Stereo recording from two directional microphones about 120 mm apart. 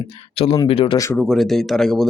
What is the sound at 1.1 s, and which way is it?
Speech, centre (ahead or behind).